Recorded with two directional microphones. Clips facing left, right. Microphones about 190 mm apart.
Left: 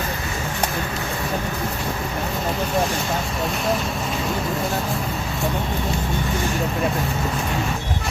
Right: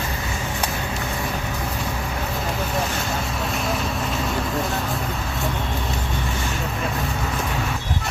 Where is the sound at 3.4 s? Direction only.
Centre (ahead or behind).